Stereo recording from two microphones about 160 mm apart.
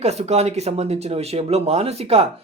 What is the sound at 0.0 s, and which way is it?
Speech, 40° right (ahead or behind).